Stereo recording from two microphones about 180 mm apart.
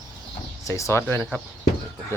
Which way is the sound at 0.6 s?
15° left (ahead or behind).